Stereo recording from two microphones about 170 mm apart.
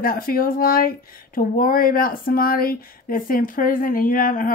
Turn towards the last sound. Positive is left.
turn(degrees=55)  # may be behind; listen again after turning